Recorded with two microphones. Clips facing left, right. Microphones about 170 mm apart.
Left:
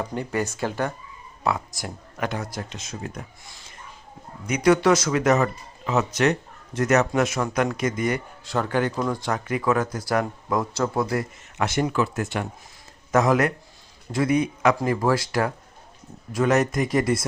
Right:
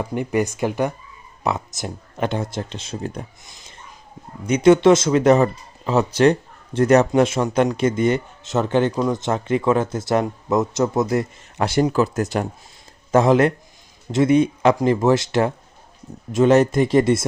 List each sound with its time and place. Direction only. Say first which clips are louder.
0.0 s speech: right 5 dB; 15° right (ahead or behind)
3.4 s a sound: even; 20° right (ahead or behind)
4.4 s speech: right 6 dB; 25° right (ahead or behind)
13.1 s speech: right 5 dB; 30° right (ahead or behind)